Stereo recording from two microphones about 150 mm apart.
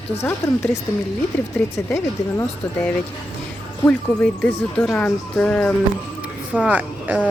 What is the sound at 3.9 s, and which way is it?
Speech, 5° left (ahead or behind).